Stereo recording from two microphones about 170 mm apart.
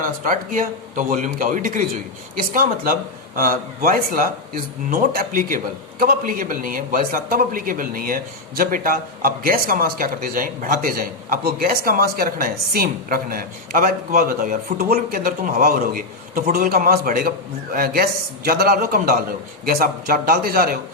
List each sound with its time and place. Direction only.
0.0 s a man's voice: 55° right (ahead or behind)